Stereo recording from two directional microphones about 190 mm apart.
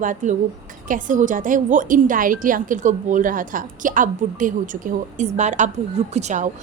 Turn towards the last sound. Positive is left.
turn(degrees=-40)  # may be behind; listen again after turning